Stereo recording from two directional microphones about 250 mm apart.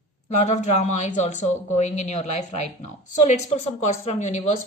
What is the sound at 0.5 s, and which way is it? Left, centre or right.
Speech, left.